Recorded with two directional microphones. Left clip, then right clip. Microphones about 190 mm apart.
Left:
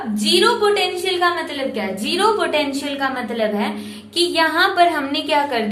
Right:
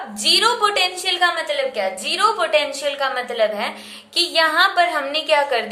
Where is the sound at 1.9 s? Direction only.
10° right (ahead or behind).